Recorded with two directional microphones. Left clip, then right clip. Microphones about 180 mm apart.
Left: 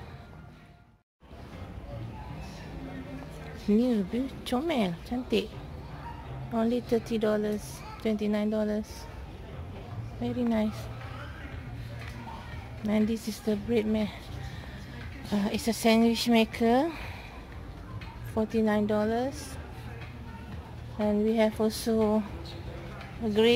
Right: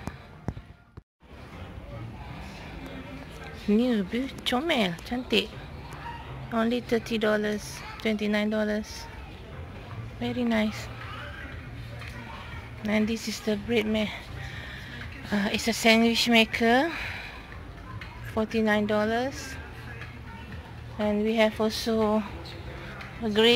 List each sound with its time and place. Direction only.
3.7 s speech: 5° left (ahead or behind)
6.5 s speech: 5° left (ahead or behind)
10.2 s speech: 10° left (ahead or behind)
12.8 s speech: 10° left (ahead or behind)
15.2 s speech: 10° left (ahead or behind)
18.4 s speech: 10° left (ahead or behind)
21.0 s speech: 15° left (ahead or behind)
22.0 s speech: centre (ahead or behind)
22.9 s a sound: centre (ahead or behind)